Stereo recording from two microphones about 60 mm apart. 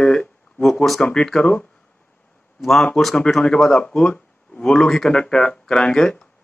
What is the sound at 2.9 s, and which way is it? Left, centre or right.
Speech, centre.